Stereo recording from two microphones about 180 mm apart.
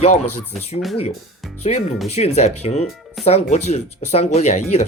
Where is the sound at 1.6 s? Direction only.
35° left (ahead or behind).